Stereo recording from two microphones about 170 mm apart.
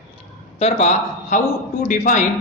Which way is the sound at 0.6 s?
40° left (ahead or behind).